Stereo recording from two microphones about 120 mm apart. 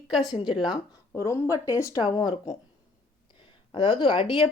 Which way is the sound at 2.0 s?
40° left (ahead or behind).